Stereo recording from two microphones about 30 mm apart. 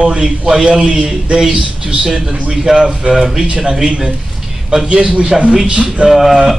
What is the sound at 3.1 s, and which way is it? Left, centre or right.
Speech, centre.